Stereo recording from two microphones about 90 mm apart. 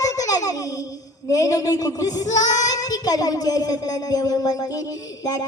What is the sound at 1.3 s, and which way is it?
Child singing, 40° left (ahead or behind).